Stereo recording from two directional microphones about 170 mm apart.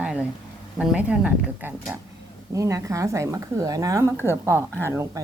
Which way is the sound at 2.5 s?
20° right (ahead or behind).